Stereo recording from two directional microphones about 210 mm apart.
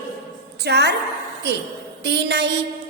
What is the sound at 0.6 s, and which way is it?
Speech, 55° right (ahead or behind).